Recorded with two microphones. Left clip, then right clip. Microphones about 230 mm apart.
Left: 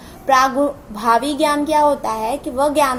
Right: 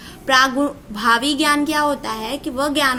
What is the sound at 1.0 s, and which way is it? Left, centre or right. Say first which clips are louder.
A woman's voice: left 1 dB; right.